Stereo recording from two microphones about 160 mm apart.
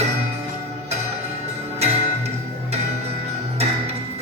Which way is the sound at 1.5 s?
40° right (ahead or behind).